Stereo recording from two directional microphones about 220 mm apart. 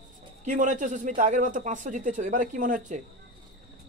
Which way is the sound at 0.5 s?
35° right (ahead or behind).